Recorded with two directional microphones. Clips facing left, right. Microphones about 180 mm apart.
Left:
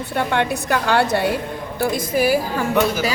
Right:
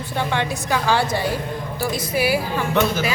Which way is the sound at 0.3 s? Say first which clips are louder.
Left 3 dB; 60° left (ahead or behind).